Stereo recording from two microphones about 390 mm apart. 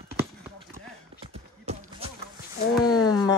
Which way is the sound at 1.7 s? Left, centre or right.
Centre.